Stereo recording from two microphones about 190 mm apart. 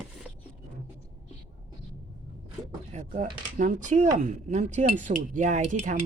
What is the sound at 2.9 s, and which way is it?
Speech, 40° right (ahead or behind).